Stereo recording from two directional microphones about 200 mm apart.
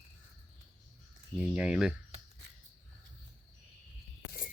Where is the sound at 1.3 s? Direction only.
5° right (ahead or behind).